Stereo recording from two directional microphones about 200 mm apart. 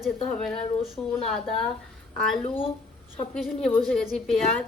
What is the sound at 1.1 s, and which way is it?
Speech, centre (ahead or behind).